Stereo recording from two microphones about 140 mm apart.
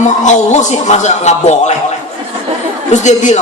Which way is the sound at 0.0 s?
60° left (ahead or behind).